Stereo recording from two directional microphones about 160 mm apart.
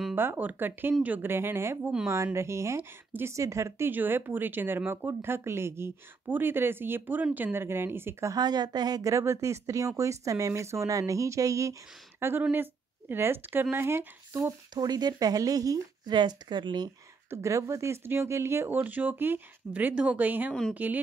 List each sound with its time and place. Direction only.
0.1 s speech: 10° right (ahead or behind)